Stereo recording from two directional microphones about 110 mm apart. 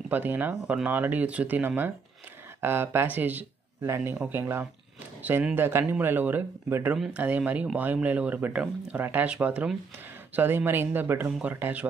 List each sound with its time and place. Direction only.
0.1 s speech: 15° right (ahead or behind)
0.6 s speech: 5° right (ahead or behind)
0.8 s speech: 15° right (ahead or behind)